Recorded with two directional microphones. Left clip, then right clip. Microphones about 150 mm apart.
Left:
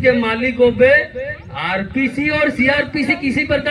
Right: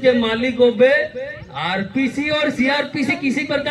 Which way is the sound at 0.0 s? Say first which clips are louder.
Left 1 dB; 20° right (ahead or behind).